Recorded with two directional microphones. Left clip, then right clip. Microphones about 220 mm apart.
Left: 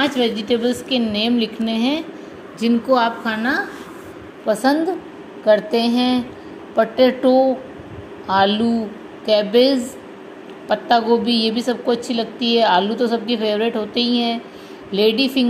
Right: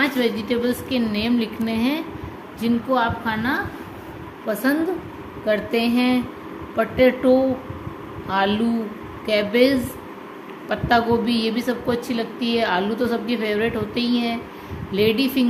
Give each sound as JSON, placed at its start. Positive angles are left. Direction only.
{"t": 0.0, "sound": "a woman's voice", "side_deg": 15}